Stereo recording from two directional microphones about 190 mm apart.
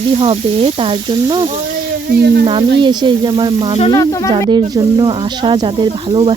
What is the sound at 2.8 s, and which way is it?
Speech, 25° right (ahead or behind).